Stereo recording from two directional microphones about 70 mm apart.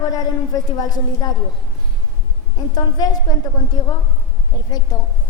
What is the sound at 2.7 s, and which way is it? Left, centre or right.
Speech, left.